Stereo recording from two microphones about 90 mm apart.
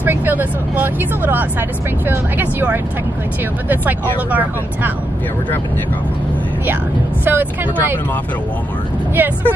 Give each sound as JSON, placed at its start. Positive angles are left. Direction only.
{"t": 0.0, "sound": "speech", "side_deg": -20}
{"t": 7.2, "sound": "speech", "side_deg": -20}
{"t": 9.1, "sound": "speech", "side_deg": -20}